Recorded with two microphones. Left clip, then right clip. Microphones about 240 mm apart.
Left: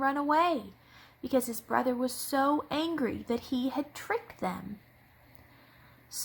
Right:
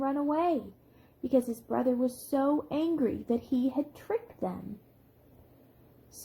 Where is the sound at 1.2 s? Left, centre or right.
Left.